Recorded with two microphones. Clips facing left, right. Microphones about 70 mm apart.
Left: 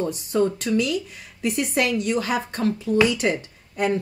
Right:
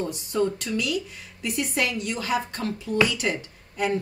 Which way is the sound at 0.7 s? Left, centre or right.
Left.